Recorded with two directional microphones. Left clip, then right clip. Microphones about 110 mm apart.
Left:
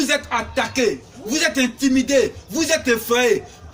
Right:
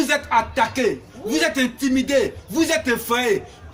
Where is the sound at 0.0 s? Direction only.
30° right (ahead or behind).